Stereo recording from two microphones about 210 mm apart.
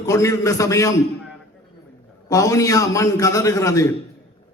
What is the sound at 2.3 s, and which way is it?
A man's voice, 15° left (ahead or behind).